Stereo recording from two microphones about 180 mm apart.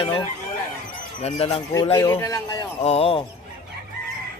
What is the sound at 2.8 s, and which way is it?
Speech, 35° left (ahead or behind).